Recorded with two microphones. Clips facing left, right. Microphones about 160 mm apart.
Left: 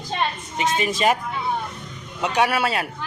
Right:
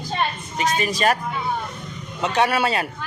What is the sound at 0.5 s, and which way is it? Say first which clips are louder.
Speech: even; 20° left (ahead or behind).